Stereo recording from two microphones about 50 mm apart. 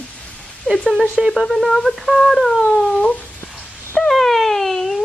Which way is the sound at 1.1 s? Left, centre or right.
Centre.